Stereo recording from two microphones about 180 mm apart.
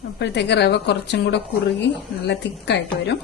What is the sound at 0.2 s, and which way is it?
A woman's voice, 70° left (ahead or behind).